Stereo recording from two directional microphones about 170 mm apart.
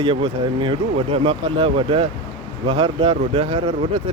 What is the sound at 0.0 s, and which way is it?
Speech, 30° right (ahead or behind).